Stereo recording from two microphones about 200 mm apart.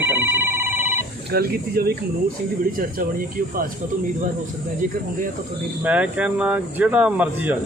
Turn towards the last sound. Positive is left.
turn(degrees=-5)  # may be behind; listen again after turning